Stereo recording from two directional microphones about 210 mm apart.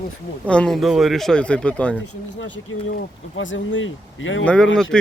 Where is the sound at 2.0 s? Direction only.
75° left (ahead or behind).